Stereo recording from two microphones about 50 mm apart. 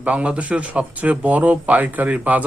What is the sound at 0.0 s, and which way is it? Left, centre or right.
Speech, right.